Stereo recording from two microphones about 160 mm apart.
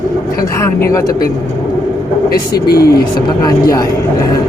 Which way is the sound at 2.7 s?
75° left (ahead or behind).